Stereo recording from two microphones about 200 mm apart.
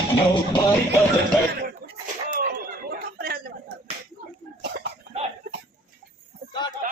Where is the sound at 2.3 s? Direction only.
50° right (ahead or behind).